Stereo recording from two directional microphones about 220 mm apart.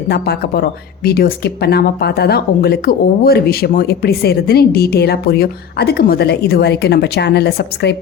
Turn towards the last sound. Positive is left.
turn(degrees=50)  # may be behind; listen again after turning